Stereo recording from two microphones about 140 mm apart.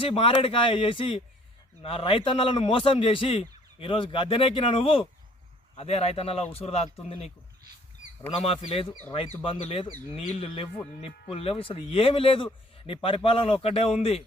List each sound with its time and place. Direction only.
0.0 s a man's voice: 40° left (ahead or behind)
8.4 s a man's voice: 45° left (ahead or behind)